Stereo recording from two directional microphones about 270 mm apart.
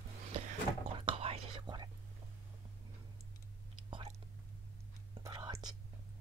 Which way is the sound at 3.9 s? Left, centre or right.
Centre.